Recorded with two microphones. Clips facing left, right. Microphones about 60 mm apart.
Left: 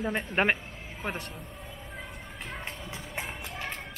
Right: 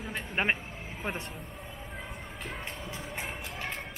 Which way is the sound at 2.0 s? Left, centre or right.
Centre.